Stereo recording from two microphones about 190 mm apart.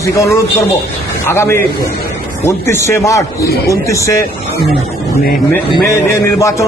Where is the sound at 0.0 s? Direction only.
15° left (ahead or behind).